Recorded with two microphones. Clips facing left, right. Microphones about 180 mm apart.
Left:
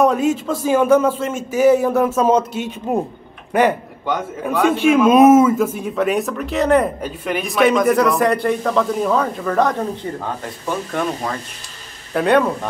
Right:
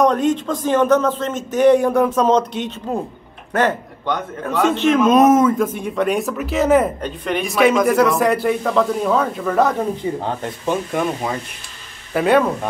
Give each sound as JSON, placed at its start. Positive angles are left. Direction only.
{"t": 0.0, "sound": "a man's voice", "side_deg": 5}
{"t": 10.1, "sound": "speech", "side_deg": -20}
{"t": 10.9, "sound": "a man's voice", "side_deg": -10}